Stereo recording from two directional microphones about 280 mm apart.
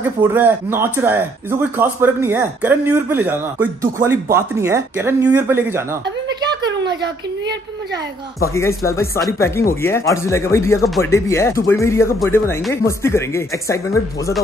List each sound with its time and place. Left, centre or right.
0.2 s speech: centre
6.2 s a sound: centre
8.4 s speech: centre